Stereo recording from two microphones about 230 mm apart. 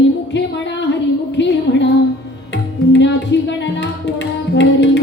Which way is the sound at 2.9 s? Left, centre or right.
Left.